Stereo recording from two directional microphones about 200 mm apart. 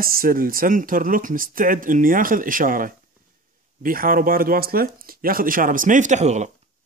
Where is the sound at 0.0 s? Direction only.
45° right (ahead or behind).